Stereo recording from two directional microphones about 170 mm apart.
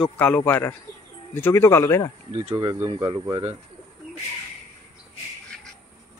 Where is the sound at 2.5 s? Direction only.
30° right (ahead or behind).